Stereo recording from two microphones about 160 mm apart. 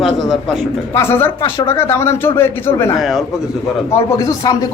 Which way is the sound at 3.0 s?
Centre (ahead or behind).